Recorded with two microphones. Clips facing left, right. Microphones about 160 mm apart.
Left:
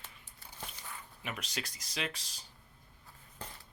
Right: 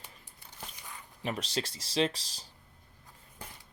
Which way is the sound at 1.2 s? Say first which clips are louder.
Right 8 dB; 35° right (ahead or behind).